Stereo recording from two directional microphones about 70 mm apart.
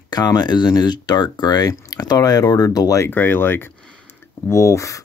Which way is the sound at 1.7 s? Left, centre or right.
Left.